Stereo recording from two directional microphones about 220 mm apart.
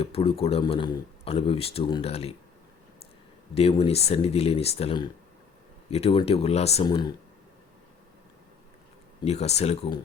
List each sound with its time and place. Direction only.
0.0 s speech: 25° left (ahead or behind)
3.5 s speech: 25° left (ahead or behind)
9.2 s speech: 30° left (ahead or behind)